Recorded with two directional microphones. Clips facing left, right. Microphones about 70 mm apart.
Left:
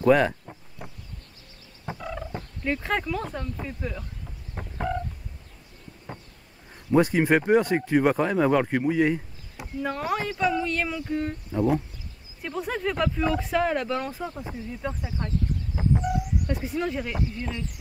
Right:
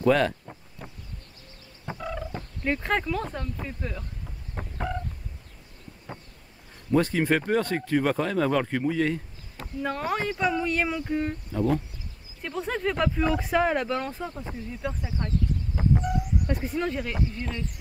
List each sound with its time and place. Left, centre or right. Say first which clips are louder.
0.0 s speech: left 2 dB; centre
0.8 s bee: left 2 dB; centre
2.0 s gobble: right 2 dB; centre
2.8 s speech: right 1 dB; centre
6.9 s speech: left 3 dB; centre
9.8 s speech: left 1 dB; centre
10.4 s speech: even; centre
11.5 s speech: left 3 dB; centre
15.7 s fowl: left 1 dB; centre
16.5 s speech: left 1 dB; centre